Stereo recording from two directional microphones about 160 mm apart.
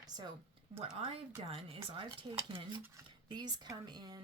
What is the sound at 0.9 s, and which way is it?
Speech, 35° right (ahead or behind).